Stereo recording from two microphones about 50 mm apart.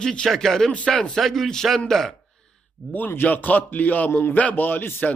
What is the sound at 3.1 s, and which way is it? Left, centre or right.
Speech, left.